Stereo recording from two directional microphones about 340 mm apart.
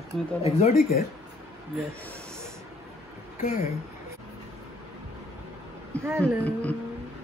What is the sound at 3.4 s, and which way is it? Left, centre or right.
Speech, left.